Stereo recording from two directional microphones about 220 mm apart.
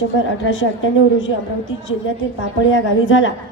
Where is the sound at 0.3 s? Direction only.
60° left (ahead or behind).